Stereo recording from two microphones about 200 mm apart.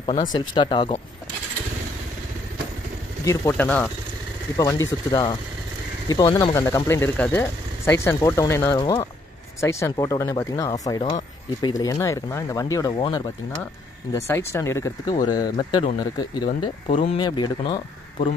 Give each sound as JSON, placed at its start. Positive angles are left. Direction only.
{"t": 0.3, "sound": "speech", "side_deg": 20}
{"t": 3.3, "sound": "speech", "side_deg": 10}